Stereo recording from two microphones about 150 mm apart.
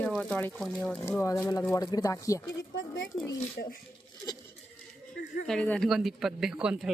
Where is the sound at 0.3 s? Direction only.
10° left (ahead or behind).